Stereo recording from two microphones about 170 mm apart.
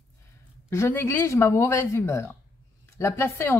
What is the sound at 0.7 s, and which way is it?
Speech, 15° left (ahead or behind).